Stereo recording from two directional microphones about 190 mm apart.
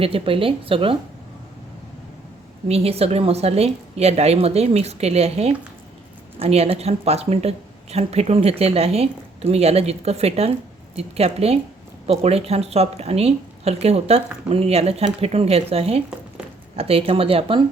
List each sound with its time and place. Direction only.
0.0 s speech: 30° right (ahead or behind)
2.6 s speech: 30° right (ahead or behind)